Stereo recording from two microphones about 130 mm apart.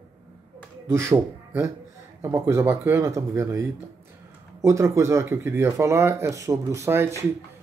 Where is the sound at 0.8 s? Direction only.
20° right (ahead or behind).